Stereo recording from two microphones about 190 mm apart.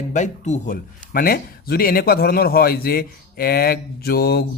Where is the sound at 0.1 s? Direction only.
40° left (ahead or behind).